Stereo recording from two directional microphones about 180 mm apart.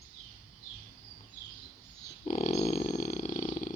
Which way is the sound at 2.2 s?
40° left (ahead or behind).